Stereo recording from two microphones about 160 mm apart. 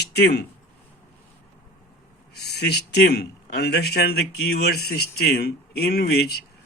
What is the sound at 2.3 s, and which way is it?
A man's voice, 90° left.